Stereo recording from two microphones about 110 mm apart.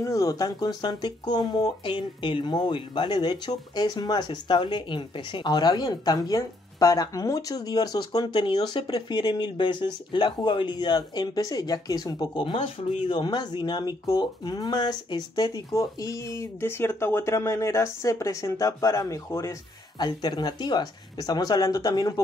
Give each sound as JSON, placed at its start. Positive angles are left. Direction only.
{"t": 0.0, "sound": "speech", "side_deg": 30}